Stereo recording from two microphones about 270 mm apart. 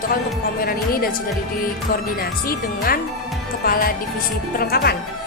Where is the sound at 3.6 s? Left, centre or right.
Left.